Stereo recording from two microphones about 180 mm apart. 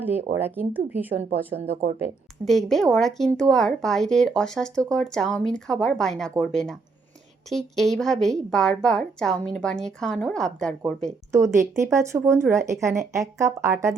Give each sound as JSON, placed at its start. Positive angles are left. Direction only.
{"t": 0.0, "sound": "speech", "side_deg": -10}
{"t": 1.5, "sound": "speech", "side_deg": -35}
{"t": 2.4, "sound": "speech", "side_deg": 0}
{"t": 11.3, "sound": "speech", "side_deg": -15}